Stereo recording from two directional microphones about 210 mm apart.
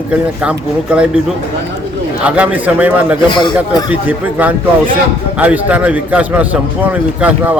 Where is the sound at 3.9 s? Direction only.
10° right (ahead or behind).